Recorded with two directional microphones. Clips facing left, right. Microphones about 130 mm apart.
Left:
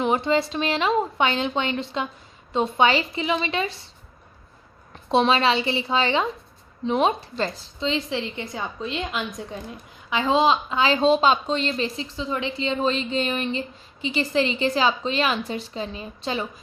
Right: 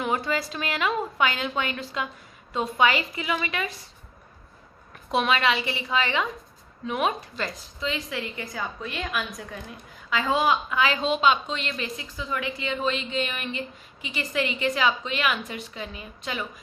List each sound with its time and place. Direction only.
0.0 s a woman's voice: 25° left (ahead or behind)
5.1 s a woman's voice: 30° left (ahead or behind)